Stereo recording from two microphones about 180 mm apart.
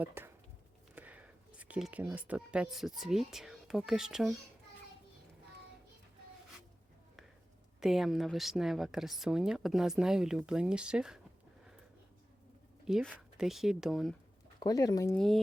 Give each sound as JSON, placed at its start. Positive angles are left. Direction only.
{"t": 0.0, "sound": "speech", "side_deg": -15}
{"t": 7.8, "sound": "speech", "side_deg": 0}
{"t": 12.8, "sound": "speech", "side_deg": -5}
{"t": 14.6, "sound": "speech", "side_deg": 20}
{"t": 15.1, "sound": "speech", "side_deg": 0}